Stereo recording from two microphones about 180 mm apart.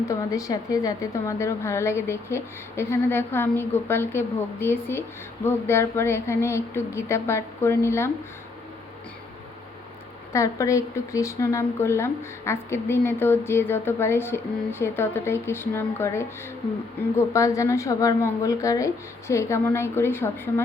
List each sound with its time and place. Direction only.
0.0 s a woman's voice: 15° left (ahead or behind)
10.3 s a woman's voice: 15° left (ahead or behind)